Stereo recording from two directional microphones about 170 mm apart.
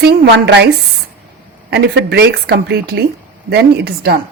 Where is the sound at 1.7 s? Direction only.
75° right (ahead or behind).